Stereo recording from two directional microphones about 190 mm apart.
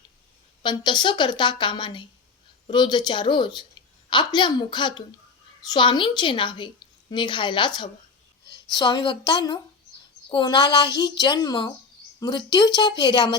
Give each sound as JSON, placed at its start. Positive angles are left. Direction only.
{"t": 0.6, "sound": "a woman's voice", "side_deg": 25}